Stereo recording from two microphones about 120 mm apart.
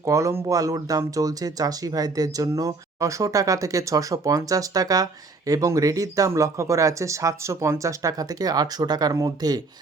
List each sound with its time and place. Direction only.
0.0 s speech: 25° right (ahead or behind)